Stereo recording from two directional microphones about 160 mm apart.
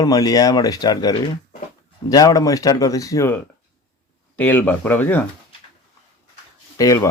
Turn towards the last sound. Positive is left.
turn(degrees=20)  # may be behind; listen again after turning